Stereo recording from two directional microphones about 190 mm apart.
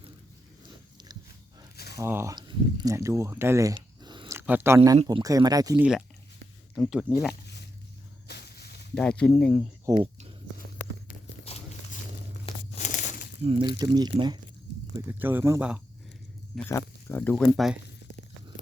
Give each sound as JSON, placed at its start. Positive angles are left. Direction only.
{"t": 1.7, "sound": "a sound", "side_deg": 55}
{"t": 2.0, "sound": "speech", "side_deg": -15}
{"t": 3.8, "sound": "biting", "side_deg": -25}
{"t": 4.4, "sound": "speech", "side_deg": -10}
{"t": 5.7, "sound": "speech", "side_deg": -5}
{"t": 8.3, "sound": "snake", "side_deg": 60}
{"t": 9.0, "sound": "speech", "side_deg": 5}
{"t": 9.9, "sound": "speech", "side_deg": -25}
{"t": 11.4, "sound": "dog", "side_deg": 35}
{"t": 12.5, "sound": "crumpling", "side_deg": 35}
{"t": 13.4, "sound": "speech", "side_deg": -30}
{"t": 14.9, "sound": "speech", "side_deg": -10}
{"t": 16.6, "sound": "speech", "side_deg": 10}